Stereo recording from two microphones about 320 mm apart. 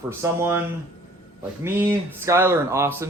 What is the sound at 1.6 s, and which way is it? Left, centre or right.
Speech, centre.